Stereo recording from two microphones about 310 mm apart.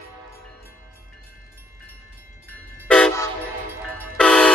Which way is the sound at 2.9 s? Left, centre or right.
Centre.